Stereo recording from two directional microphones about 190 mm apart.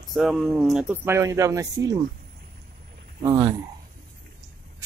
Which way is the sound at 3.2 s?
20° right (ahead or behind).